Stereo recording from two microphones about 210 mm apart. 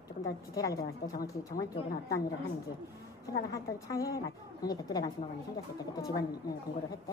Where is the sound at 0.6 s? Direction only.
15° left (ahead or behind).